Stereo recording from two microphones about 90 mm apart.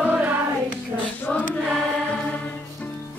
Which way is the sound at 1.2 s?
20° left (ahead or behind).